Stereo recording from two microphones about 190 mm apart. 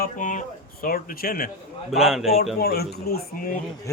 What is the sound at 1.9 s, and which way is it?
Speech, centre (ahead or behind).